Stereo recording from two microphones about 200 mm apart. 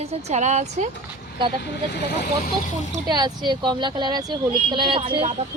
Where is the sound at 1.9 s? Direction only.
55° left (ahead or behind).